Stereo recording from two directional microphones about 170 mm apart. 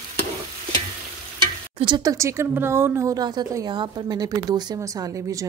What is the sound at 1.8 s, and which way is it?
Speech, 25° right (ahead or behind).